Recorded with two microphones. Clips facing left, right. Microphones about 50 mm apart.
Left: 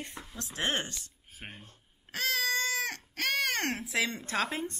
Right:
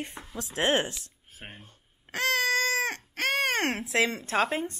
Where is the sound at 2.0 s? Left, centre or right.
Right.